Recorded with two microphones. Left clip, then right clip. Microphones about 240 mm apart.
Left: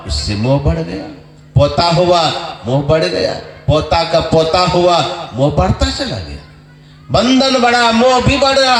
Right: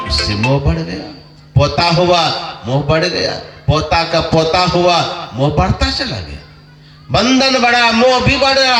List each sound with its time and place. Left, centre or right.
0.2 s a man's voice: right
7.1 s a man's voice: right